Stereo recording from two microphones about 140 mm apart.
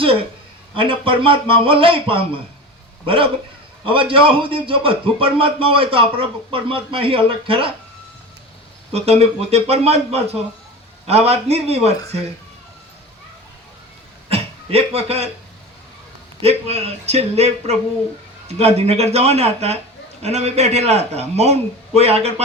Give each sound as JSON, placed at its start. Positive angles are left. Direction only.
{"t": 0.7, "sound": "speech", "side_deg": -40}
{"t": 3.8, "sound": "speech", "side_deg": -40}
{"t": 8.9, "sound": "a man's voice", "side_deg": -45}
{"t": 14.3, "sound": "a sound", "side_deg": -45}
{"t": 16.4, "sound": "a man's voice", "side_deg": -45}